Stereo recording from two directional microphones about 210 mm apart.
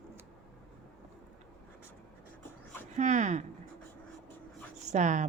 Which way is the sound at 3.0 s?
35° right (ahead or behind).